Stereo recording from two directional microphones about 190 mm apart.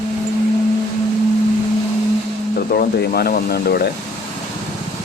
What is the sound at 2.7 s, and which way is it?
Speech, 55° left (ahead or behind).